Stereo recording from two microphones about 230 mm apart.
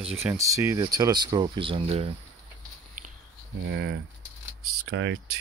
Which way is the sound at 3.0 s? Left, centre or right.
Right.